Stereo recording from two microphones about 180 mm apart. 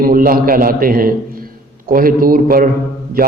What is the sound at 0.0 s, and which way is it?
A man's voice, 50° right (ahead or behind).